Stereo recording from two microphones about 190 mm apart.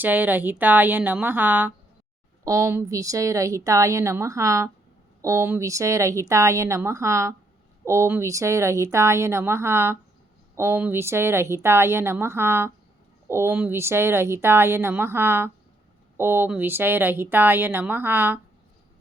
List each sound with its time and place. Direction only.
0.0 s a woman's voice: 10° right (ahead or behind)